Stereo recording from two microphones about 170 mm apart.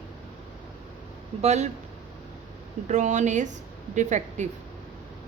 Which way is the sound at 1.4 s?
40° right (ahead or behind).